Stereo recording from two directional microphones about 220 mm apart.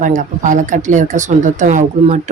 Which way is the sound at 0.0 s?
35° right (ahead or behind).